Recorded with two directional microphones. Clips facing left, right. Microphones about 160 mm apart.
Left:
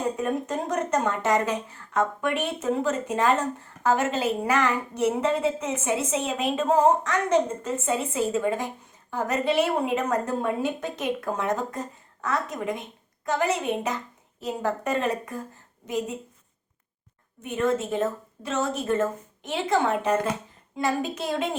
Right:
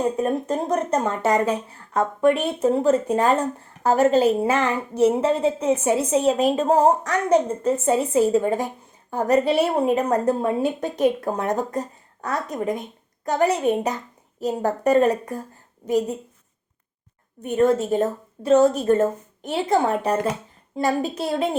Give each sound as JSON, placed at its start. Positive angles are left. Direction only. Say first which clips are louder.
{"t": 0.2, "sound": "a woman's voice", "louder": "right 4 dB", "side_deg": -30}
{"t": 17.4, "sound": "a woman's voice", "louder": "right 6 dB", "side_deg": -35}